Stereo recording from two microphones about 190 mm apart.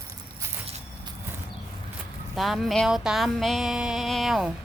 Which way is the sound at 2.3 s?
Centre (ahead or behind).